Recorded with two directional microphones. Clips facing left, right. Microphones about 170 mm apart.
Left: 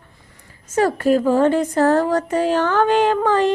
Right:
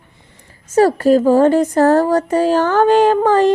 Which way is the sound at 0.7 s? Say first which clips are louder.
Right 5 dB; 35° right (ahead or behind).